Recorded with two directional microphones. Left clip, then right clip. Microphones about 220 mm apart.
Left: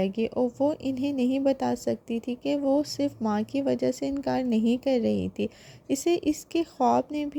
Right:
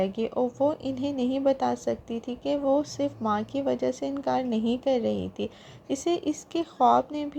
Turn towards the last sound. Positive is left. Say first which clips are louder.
# right 2 dB
turn(degrees=50)  # may be behind; listen again after turning